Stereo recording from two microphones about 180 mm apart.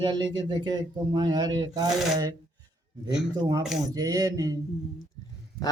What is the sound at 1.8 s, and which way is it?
Child singing, centre (ahead or behind).